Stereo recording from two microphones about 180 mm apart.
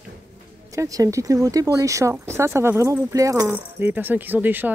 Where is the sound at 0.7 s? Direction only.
20° right (ahead or behind).